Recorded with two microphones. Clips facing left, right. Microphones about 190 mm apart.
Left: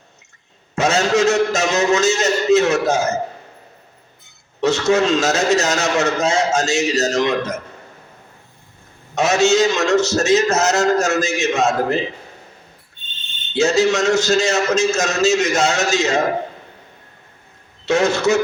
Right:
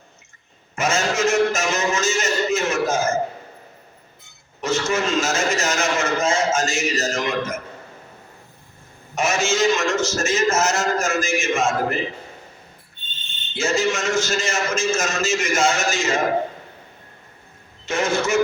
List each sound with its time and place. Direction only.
0.8 s a sound: 70° left (ahead or behind)
4.6 s a man's voice: 70° left (ahead or behind)
9.1 s a man's voice: 70° left (ahead or behind)
13.6 s a man's voice: 70° left (ahead or behind)
17.8 s a man's voice: 70° left (ahead or behind)